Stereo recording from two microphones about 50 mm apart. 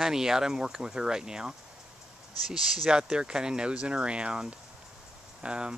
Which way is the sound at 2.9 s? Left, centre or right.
Centre.